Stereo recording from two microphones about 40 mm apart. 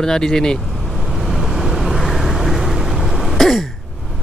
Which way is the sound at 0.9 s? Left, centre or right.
Centre.